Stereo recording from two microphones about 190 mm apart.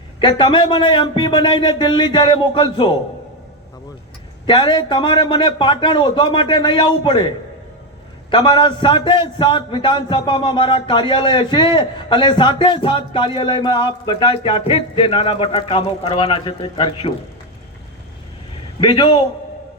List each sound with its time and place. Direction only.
0.2 s a man's voice: 25° left (ahead or behind)
4.4 s a man's voice: 25° left (ahead or behind)
8.3 s a man's voice: 25° left (ahead or behind)
18.8 s a man's voice: 25° left (ahead or behind)